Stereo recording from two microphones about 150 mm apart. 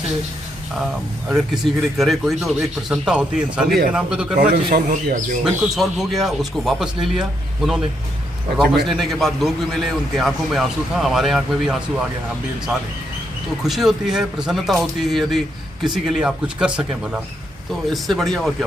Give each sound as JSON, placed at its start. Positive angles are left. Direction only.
{"t": 1.3, "sound": "a man's voice", "side_deg": 0}
{"t": 4.4, "sound": "speech", "side_deg": -80}
{"t": 5.4, "sound": "a man's voice", "side_deg": -5}
{"t": 8.8, "sound": "a man's voice", "side_deg": 0}
{"t": 13.6, "sound": "a man's voice", "side_deg": 0}